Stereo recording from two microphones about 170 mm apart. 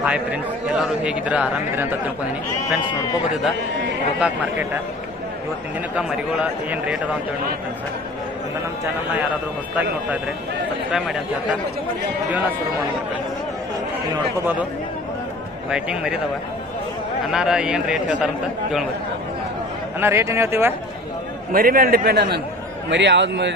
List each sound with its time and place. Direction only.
0.0 s speech: 5° right (ahead or behind)
6.0 s speech: 5° right (ahead or behind)
9.1 s speech: 10° right (ahead or behind)
14.3 s speech: 10° right (ahead or behind)
15.7 s speech: 5° right (ahead or behind)
17.3 s speech: 5° right (ahead or behind)
20.0 s speech: 15° right (ahead or behind)
21.5 s a man's voice: 55° right (ahead or behind)
22.9 s a man's voice: 90° right